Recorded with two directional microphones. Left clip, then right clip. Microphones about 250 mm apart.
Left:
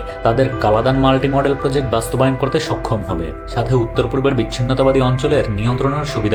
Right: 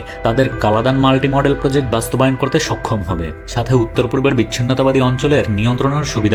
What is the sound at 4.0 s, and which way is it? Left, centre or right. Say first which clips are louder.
Speech: right 1 dB; right.